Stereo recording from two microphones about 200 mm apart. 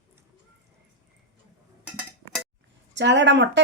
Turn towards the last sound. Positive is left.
turn(degrees=-60)  # may be behind; listen again after turning